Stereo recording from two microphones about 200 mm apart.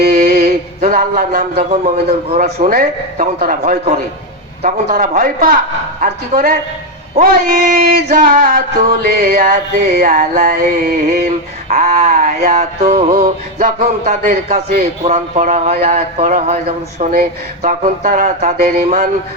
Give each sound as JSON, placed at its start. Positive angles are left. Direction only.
{"t": 0.0, "sound": "mantra", "side_deg": -45}
{"t": 2.3, "sound": "music", "side_deg": -40}
{"t": 4.9, "sound": "a sound", "side_deg": -45}
{"t": 11.7, "sound": "music", "side_deg": -40}